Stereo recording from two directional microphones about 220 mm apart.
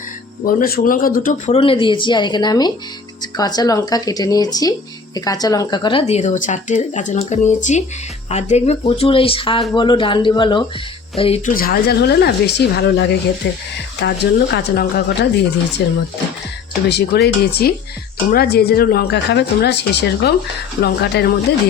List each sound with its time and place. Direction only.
0.4 s speech: 40° left (ahead or behind)
11.5 s a woman's voice: 40° left (ahead or behind)